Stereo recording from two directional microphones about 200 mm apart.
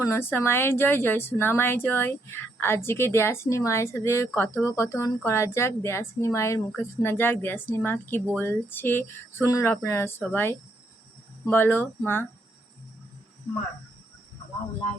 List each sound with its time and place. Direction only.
0.0 s a woman's voice: 10° left (ahead or behind)